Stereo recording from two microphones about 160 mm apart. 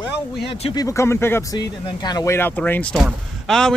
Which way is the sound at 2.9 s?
Centre (ahead or behind).